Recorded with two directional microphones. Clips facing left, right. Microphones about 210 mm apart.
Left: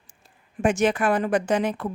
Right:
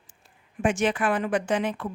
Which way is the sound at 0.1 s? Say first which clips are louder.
Left 4 dB; 40° left (ahead or behind).